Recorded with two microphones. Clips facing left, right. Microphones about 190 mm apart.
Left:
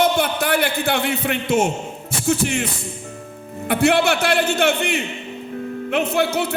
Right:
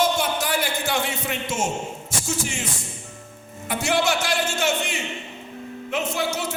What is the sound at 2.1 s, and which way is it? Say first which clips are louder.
Music: left 10 dB; 60° left (ahead or behind).